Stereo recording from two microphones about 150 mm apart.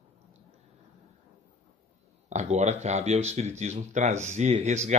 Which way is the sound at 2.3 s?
50° right (ahead or behind).